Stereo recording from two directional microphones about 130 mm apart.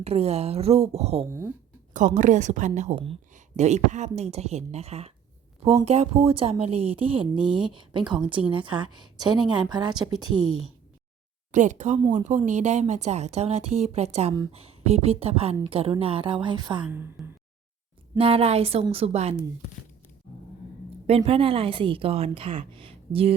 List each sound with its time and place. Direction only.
0.0 s speech: 55° right (ahead or behind)
1.3 s speech: 20° right (ahead or behind)
1.9 s a woman's voice: 75° right (ahead or behind)
2.9 s speech: 45° right (ahead or behind)
3.6 s a woman's voice: 60° right (ahead or behind); by 10.4 s 30° right (ahead or behind)
11.5 s a woman's voice: 70° right (ahead or behind); by 16.8 s 35° right (ahead or behind)
16.8 s speech: 15° right (ahead or behind)
18.2 s speech: 45° right (ahead or behind)
21.1 s speech: 50° right (ahead or behind)